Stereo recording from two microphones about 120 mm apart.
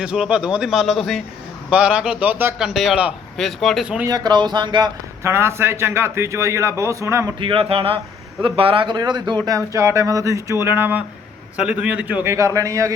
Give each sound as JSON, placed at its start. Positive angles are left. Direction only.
{"t": 0.0, "sound": "speech", "side_deg": -10}
{"t": 2.6, "sound": "speech", "side_deg": -5}
{"t": 3.3, "sound": "speech", "side_deg": 0}
{"t": 4.1, "sound": "speech", "side_deg": -35}
{"t": 5.2, "sound": "speech", "side_deg": -20}
{"t": 7.3, "sound": "speech", "side_deg": -45}
{"t": 9.5, "sound": "speech", "side_deg": -25}
{"t": 12.2, "sound": "speech", "side_deg": -25}